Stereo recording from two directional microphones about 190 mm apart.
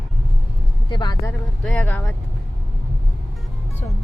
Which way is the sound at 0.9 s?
20° left (ahead or behind).